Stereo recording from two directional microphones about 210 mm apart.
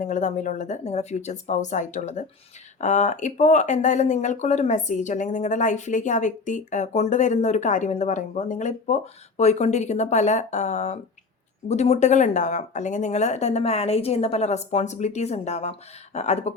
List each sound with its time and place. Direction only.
0.0 s speech: 35° left (ahead or behind)